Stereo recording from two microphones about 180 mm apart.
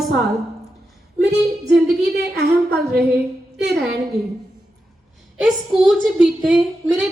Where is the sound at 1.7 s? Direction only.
65° right (ahead or behind).